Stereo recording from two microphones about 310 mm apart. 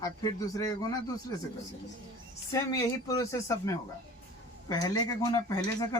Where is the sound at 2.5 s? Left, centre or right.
Centre.